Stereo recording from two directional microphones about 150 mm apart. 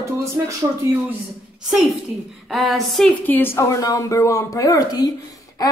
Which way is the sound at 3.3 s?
15° left (ahead or behind).